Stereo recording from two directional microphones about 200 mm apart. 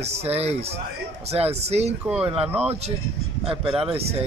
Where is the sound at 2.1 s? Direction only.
5° right (ahead or behind).